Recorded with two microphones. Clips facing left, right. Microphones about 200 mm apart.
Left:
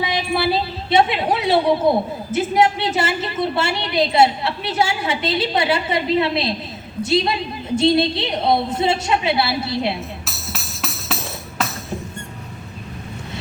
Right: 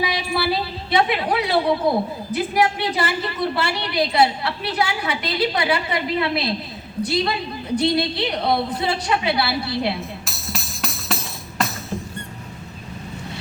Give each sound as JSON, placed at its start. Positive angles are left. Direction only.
{"t": 0.0, "sound": "a woman's voice", "side_deg": 25}
{"t": 10.2, "sound": "music", "side_deg": 0}